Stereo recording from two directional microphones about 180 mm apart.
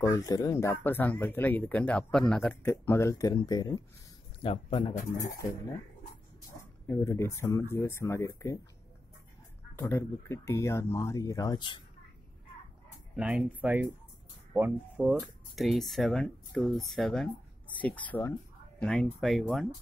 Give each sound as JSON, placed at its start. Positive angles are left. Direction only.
{"t": 0.0, "sound": "speech", "side_deg": 20}
{"t": 4.4, "sound": "speech", "side_deg": 30}
{"t": 6.9, "sound": "speech", "side_deg": 15}
{"t": 9.8, "sound": "speech", "side_deg": 15}
{"t": 13.1, "sound": "speech", "side_deg": -5}